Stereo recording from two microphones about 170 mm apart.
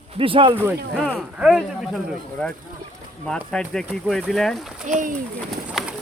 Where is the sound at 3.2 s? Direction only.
5° left (ahead or behind).